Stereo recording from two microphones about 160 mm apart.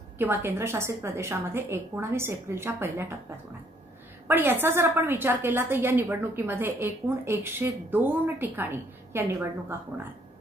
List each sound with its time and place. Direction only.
0.2 s a woman's voice: 15° right (ahead or behind)
4.3 s a woman's voice: 10° right (ahead or behind)